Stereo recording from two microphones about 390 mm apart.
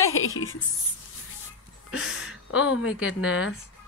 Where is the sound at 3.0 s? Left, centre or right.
Centre.